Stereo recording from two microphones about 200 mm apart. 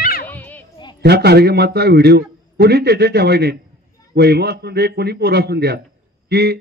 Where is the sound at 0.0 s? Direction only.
45° left (ahead or behind).